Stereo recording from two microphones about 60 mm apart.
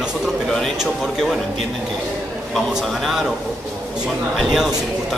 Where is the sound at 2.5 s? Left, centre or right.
Centre.